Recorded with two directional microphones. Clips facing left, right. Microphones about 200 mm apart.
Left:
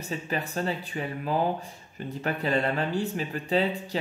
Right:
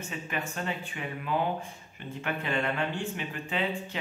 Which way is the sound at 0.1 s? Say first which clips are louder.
Left 6 dB; 35° left (ahead or behind).